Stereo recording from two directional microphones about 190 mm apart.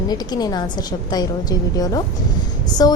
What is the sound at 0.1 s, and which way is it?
A woman's voice, 20° left (ahead or behind).